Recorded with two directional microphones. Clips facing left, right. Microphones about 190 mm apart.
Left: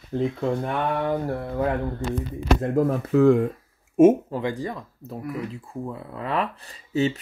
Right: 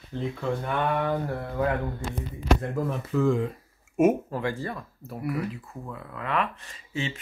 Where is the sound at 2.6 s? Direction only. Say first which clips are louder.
Left 7 dB; 45° left (ahead or behind).